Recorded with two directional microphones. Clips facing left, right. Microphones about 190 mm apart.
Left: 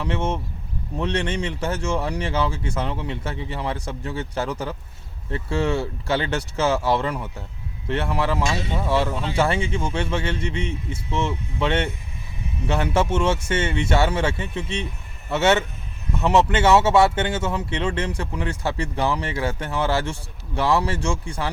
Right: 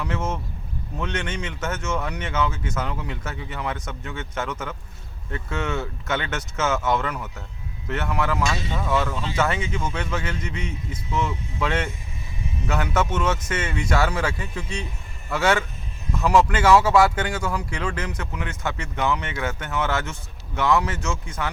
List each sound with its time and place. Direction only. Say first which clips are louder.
0.0 s speech: left 3 dB; 30° left (ahead or behind)